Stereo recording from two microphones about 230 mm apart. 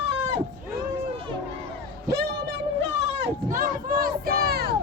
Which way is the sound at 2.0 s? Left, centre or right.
Right.